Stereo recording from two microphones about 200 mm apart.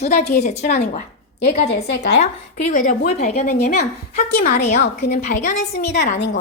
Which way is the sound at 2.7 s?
40° left (ahead or behind).